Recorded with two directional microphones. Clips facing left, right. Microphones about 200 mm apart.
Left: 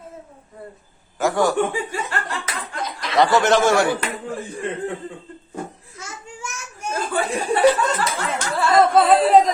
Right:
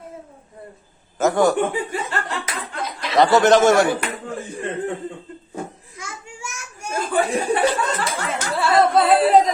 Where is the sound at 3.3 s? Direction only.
20° right (ahead or behind).